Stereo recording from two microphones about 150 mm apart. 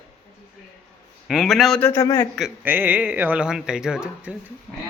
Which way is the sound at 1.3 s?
Centre (ahead or behind).